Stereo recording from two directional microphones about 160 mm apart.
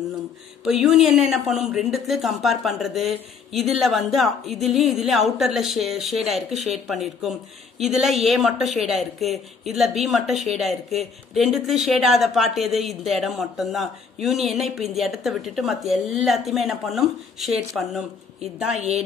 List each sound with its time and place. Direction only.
0.7 s a woman's voice: centre (ahead or behind)
18.8 s a woman's voice: 40° right (ahead or behind)